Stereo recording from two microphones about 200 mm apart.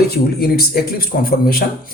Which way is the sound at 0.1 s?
50° left (ahead or behind).